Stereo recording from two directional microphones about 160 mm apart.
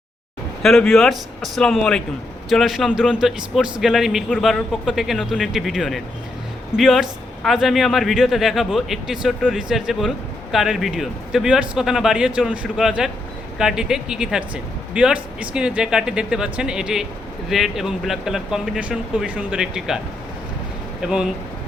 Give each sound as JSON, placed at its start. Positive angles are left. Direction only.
{"t": 0.6, "sound": "speech", "side_deg": 0}
{"t": 21.0, "sound": "speech", "side_deg": -5}